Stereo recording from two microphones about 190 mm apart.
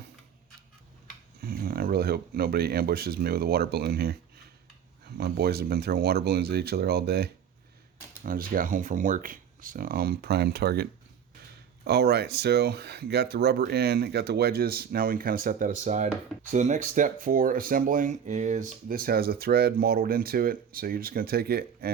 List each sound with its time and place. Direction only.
1.4 s speech: 50° right (ahead or behind)
11.9 s speech: 55° right (ahead or behind)